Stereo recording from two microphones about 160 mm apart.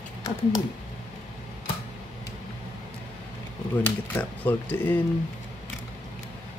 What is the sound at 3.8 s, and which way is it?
Speech, 10° left (ahead or behind).